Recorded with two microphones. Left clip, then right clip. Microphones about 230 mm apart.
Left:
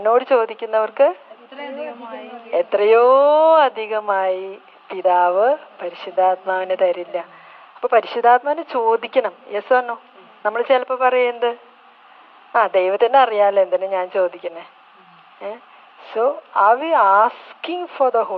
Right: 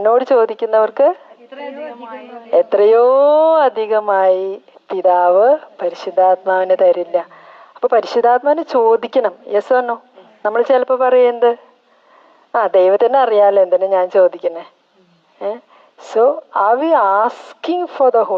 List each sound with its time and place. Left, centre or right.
0.0 s speech: right
2.5 s speech: right